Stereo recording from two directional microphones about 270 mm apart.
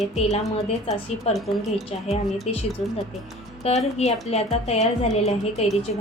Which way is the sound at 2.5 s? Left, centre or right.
Left.